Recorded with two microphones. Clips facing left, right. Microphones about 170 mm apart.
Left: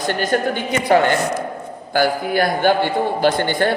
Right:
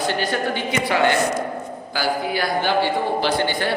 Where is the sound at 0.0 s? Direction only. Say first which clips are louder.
Left 3 dB; 45° left (ahead or behind).